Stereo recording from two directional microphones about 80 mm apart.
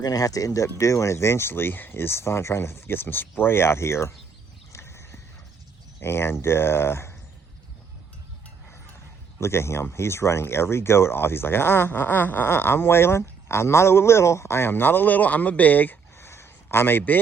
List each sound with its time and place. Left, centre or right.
0.0 s speech: left
4.7 s horse: left
6.0 s speech: left
9.4 s a man's voice: left